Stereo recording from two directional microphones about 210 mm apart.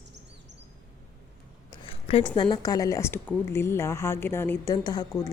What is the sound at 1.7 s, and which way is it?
Speech, 25° left (ahead or behind).